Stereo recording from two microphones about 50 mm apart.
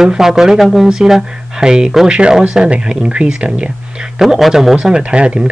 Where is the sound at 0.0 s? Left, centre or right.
Centre.